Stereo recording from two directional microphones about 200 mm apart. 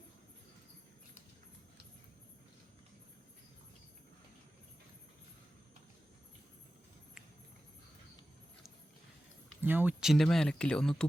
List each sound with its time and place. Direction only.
9.6 s speech: 10° right (ahead or behind)